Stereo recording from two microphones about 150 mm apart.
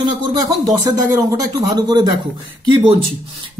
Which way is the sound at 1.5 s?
25° right (ahead or behind).